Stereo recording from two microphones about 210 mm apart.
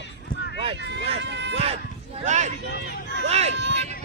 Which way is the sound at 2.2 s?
35° right (ahead or behind).